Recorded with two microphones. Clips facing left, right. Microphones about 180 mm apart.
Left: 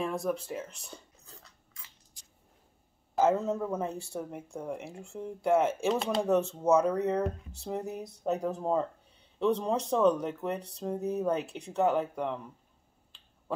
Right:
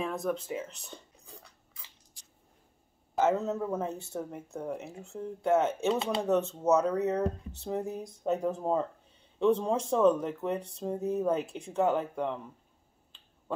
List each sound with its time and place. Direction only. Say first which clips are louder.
0.0 s speech: left 1 dB; centre (ahead or behind)
3.2 s speech: left 1 dB; centre (ahead or behind)
4.1 s speech: even; 10° left (ahead or behind)
4.6 s speech: right 1 dB; 5° right (ahead or behind)
8.4 s speech: left 1 dB; 10° right (ahead or behind)